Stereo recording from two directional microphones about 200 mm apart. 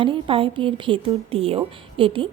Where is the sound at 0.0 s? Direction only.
25° right (ahead or behind).